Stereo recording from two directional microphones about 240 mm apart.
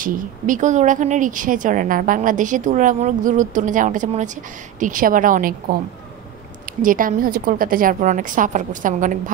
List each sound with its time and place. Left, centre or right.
0.0 s a woman's voice: right
6.8 s a woman's voice: right